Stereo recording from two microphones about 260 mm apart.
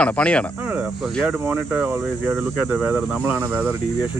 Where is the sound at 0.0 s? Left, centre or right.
Centre.